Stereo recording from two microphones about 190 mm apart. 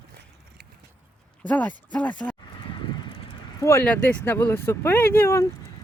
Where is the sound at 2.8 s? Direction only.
25° left (ahead or behind).